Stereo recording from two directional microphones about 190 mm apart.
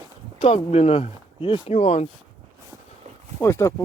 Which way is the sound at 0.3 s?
35° left (ahead or behind).